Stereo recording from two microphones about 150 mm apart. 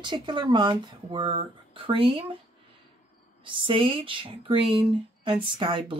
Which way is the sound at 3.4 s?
35° right (ahead or behind).